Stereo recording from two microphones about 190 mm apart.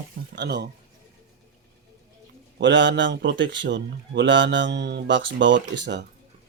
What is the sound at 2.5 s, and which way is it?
A man's voice, 70° right (ahead or behind).